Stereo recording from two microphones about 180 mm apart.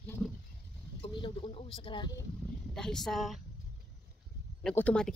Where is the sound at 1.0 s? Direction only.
25° left (ahead or behind).